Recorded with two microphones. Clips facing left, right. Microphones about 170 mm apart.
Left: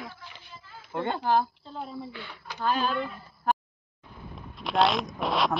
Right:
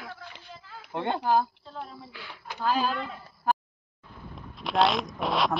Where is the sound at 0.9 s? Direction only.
15° right (ahead or behind).